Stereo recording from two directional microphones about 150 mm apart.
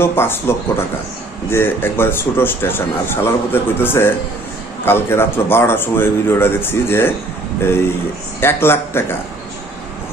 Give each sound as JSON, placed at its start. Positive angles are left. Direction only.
{"t": 0.0, "sound": "a man's voice", "side_deg": 15}
{"t": 8.4, "sound": "a man's voice", "side_deg": 15}